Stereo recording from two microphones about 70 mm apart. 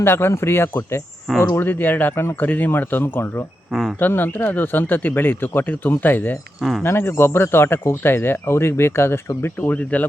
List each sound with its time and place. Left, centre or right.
0.0 s speech: left
3.7 s speech: centre
4.0 s speech: left
6.6 s speech: centre
6.8 s speech: left